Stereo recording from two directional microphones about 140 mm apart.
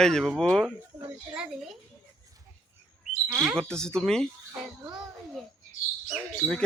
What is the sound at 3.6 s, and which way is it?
Speech, 5° left (ahead or behind).